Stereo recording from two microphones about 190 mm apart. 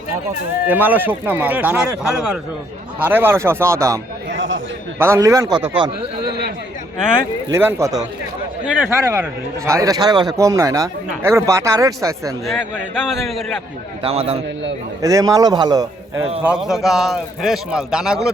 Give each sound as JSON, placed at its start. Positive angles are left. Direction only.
{"t": 0.7, "sound": "speech", "side_deg": -10}
{"t": 4.3, "sound": "chatter", "side_deg": -85}
{"t": 4.9, "sound": "speech", "side_deg": -15}
{"t": 7.5, "sound": "speech", "side_deg": -15}
{"t": 12.5, "sound": "a man's voice", "side_deg": 0}
{"t": 14.0, "sound": "a man's voice", "side_deg": -30}
{"t": 15.0, "sound": "a man's voice", "side_deg": -20}
{"t": 16.4, "sound": "a man's voice", "side_deg": -5}